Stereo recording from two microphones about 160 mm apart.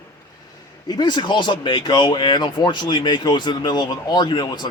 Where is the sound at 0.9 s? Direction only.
25° left (ahead or behind).